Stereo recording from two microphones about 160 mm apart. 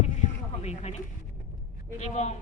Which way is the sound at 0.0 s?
45° left (ahead or behind).